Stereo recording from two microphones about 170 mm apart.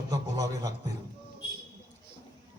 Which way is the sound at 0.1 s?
25° right (ahead or behind).